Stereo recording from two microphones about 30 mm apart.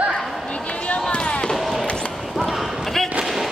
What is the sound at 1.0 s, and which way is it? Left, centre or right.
Basketball bounce, left.